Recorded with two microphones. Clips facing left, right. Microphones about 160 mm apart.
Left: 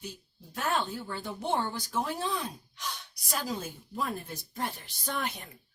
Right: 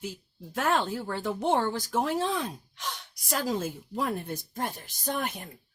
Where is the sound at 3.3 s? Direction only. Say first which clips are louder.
Right 5 dB; 55° right (ahead or behind).